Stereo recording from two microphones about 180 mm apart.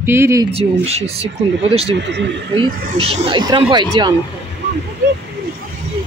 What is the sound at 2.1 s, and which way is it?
Speech, 75° right (ahead or behind).